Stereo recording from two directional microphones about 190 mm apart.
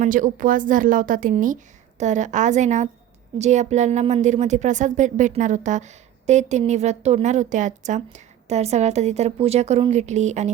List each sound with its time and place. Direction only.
0.0 s a woman's voice: 45° right (ahead or behind)